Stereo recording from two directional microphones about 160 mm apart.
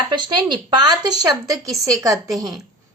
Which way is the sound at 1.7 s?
Centre (ahead or behind).